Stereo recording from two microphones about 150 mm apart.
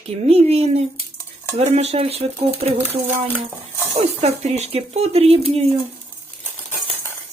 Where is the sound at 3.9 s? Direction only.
45° right (ahead or behind).